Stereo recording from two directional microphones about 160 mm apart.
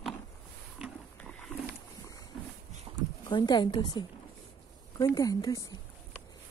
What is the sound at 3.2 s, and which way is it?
Speech, 25° left (ahead or behind).